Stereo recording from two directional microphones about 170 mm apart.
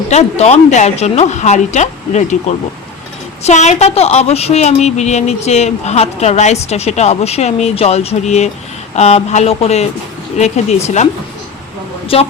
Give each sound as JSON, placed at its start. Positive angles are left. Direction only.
{"t": 0.1, "sound": "a woman's voice", "side_deg": 40}
{"t": 3.4, "sound": "a woman's voice", "side_deg": 40}